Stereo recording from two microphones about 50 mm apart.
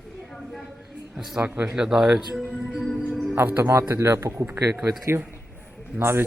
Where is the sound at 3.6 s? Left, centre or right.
Right.